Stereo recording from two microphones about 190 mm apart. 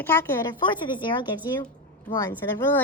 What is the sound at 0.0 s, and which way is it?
Speech, 15° left (ahead or behind).